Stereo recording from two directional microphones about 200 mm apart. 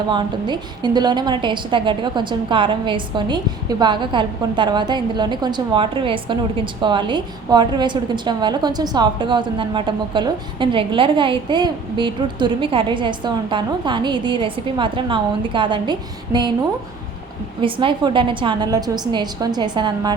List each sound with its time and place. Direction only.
0.1 s a woman's voice: 20° right (ahead or behind)
17.6 s a woman's voice: 25° right (ahead or behind)